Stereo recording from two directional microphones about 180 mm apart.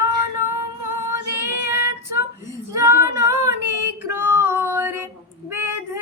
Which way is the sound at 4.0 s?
15° right (ahead or behind).